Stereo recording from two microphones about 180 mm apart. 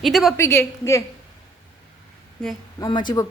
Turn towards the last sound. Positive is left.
turn(degrees=25)  # may be behind; listen again after turning